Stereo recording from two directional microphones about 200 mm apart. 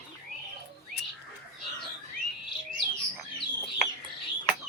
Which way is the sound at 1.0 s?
55° left (ahead or behind).